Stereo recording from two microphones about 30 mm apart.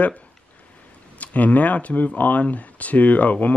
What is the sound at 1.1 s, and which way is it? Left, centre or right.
Speech, left.